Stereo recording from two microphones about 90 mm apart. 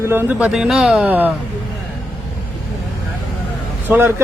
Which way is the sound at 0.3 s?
10° right (ahead or behind).